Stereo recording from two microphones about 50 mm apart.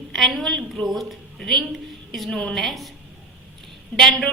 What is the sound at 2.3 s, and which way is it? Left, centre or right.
Speech, centre.